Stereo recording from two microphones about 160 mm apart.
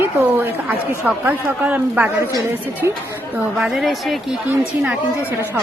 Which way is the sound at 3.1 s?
15° right (ahead or behind).